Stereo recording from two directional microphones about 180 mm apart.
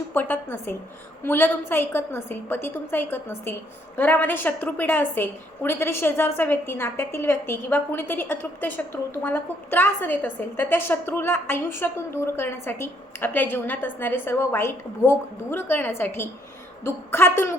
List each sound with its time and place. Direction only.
0.1 s a woman's voice: 10° left (ahead or behind)